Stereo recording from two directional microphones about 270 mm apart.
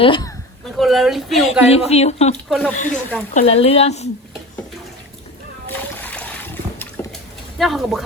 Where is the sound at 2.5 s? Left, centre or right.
Centre.